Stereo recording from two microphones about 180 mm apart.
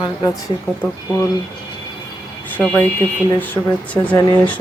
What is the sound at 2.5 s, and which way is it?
Speech, 5° left (ahead or behind).